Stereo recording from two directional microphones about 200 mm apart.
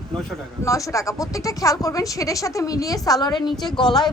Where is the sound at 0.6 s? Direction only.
15° left (ahead or behind).